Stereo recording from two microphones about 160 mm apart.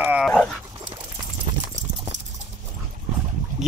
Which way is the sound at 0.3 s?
5° left (ahead or behind).